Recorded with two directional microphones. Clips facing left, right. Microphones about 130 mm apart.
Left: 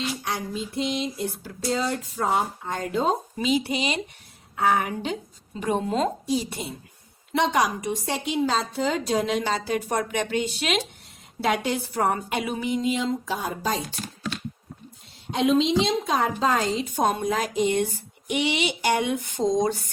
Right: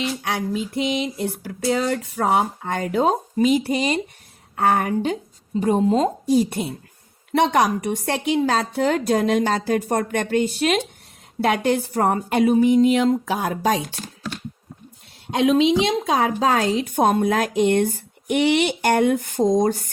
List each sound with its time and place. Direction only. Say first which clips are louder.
0.2 s speech: right 5 dB; 65° right (ahead or behind)
3.3 s a woman's voice: right 6 dB; 50° right (ahead or behind)
5.5 s speech: right 6 dB; 35° right (ahead or behind)
6.2 s a woman's voice: right 8 dB; 50° right (ahead or behind); by 13.8 s 80° right
15.3 s a woman's voice: right 4 dB; 80° right; by 19.9 s 50° right (ahead or behind)